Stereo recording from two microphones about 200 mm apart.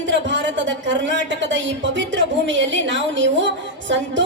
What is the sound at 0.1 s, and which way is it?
Speech, 65° right (ahead or behind).